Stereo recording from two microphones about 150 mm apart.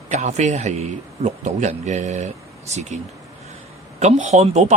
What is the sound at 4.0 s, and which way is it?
Speech, 50° right (ahead or behind).